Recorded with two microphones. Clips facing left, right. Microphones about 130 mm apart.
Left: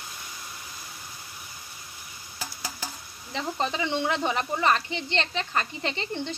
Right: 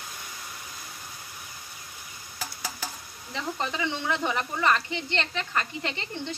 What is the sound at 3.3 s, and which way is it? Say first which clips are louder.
Speech: left 2 dB; 25° left (ahead or behind).